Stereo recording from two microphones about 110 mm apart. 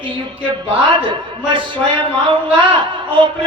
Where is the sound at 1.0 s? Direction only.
50° right (ahead or behind).